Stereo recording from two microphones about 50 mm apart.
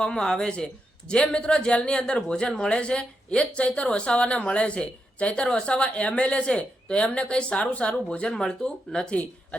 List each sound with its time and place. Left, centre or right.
0.0 s a man's voice: centre